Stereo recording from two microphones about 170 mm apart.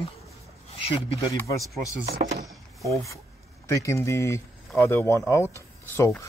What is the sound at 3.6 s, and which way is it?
Speech, 20° left (ahead or behind).